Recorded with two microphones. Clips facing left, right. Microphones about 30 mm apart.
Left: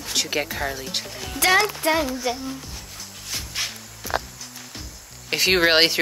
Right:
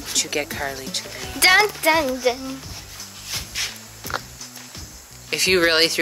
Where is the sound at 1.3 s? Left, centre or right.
Right.